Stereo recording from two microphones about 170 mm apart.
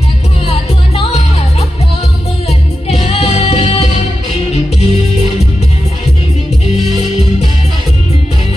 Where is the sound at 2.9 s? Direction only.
35° left (ahead or behind).